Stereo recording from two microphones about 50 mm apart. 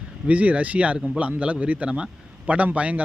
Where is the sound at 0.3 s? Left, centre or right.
Right.